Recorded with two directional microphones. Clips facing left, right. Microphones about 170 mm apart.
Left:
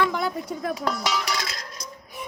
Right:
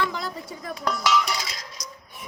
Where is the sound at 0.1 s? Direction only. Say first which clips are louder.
Left 5 dB; 60° left (ahead or behind).